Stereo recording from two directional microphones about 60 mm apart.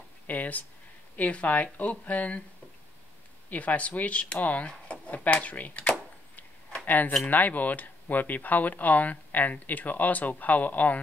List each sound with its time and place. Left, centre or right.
0.3 s speech: left
3.4 s speech: left
5.0 s a sound: left
6.9 s speech: left